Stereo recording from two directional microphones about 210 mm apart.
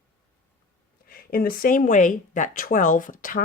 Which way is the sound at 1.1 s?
45° left (ahead or behind).